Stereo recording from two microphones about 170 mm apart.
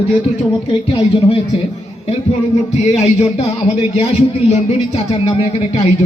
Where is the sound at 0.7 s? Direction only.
30° left (ahead or behind).